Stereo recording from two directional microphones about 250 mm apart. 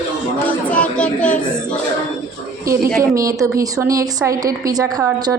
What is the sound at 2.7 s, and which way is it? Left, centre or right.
A woman's voice, centre.